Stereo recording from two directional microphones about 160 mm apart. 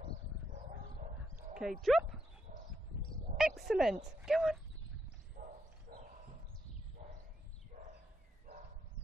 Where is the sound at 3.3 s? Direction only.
Centre (ahead or behind).